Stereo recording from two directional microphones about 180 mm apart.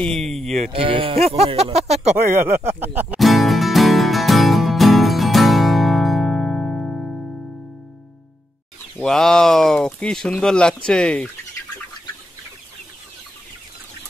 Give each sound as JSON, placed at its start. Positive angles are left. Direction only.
{"t": 0.0, "sound": "speech", "side_deg": 0}
{"t": 0.7, "sound": "speech", "side_deg": -30}
{"t": 3.0, "sound": "music", "side_deg": -5}
{"t": 8.9, "sound": "speech", "side_deg": 5}